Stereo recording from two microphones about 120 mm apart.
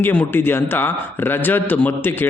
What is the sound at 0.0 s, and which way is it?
A man's voice, 15° left (ahead or behind).